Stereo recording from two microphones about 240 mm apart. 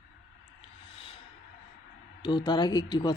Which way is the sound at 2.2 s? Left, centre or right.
Centre.